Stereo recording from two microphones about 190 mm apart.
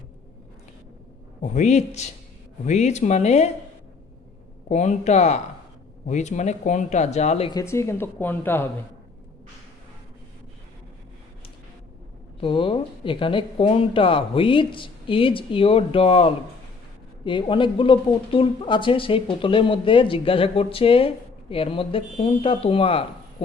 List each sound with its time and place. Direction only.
1.4 s speech: 40° left (ahead or behind)
4.7 s speech: 40° left (ahead or behind)
7.5 s speech: 15° left (ahead or behind)
12.4 s speech: 30° left (ahead or behind)